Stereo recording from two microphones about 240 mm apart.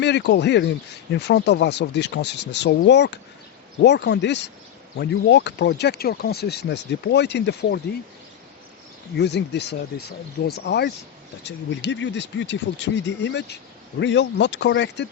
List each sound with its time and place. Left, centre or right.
0.0 s speech: left
9.1 s speech: left